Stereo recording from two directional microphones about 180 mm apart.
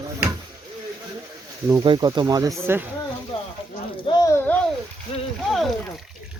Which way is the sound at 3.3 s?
25° left (ahead or behind).